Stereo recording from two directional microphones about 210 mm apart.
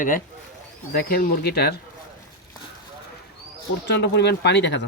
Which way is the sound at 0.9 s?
45° left (ahead or behind).